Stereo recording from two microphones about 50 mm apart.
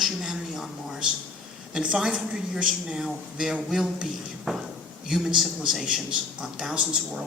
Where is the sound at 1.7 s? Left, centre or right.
Centre.